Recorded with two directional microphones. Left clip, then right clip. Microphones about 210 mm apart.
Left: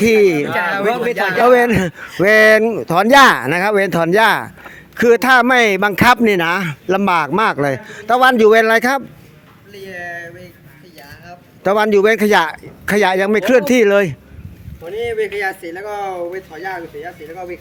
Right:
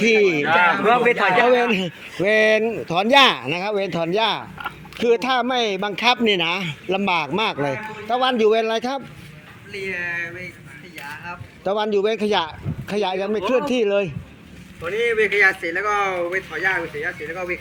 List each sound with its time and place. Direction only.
0.0 s speech: 30° left (ahead or behind)
0.7 s speech: 45° left (ahead or behind)
11.6 s speech: 45° left (ahead or behind)
15.0 s speech: 20° left (ahead or behind)